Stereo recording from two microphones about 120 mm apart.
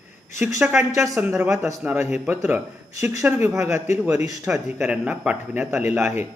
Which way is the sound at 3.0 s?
30° right (ahead or behind).